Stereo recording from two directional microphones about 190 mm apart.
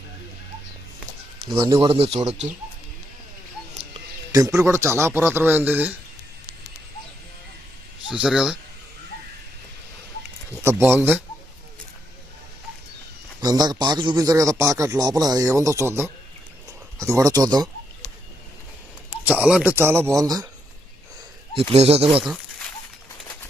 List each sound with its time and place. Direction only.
1.5 s a man's voice: 30° right (ahead or behind)
4.3 s speech: 15° right (ahead or behind)
8.1 s speech: 5° right (ahead or behind)
10.6 s speech: 10° right (ahead or behind)
13.4 s a man's voice: 20° right (ahead or behind)
19.1 s speech: 5° right (ahead or behind)
21.7 s speech: 30° right (ahead or behind)
22.2 s a sound: centre (ahead or behind)